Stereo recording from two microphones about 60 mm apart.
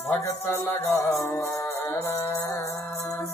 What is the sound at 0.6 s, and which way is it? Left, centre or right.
Music, left.